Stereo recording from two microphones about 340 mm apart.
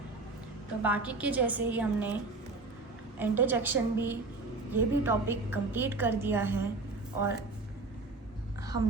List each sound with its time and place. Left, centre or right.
0.8 s a woman's voice: centre
3.2 s a woman's voice: centre